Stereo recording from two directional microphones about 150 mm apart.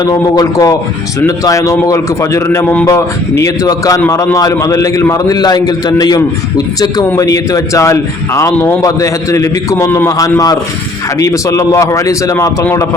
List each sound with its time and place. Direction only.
0.0 s a man's voice: 25° left (ahead or behind)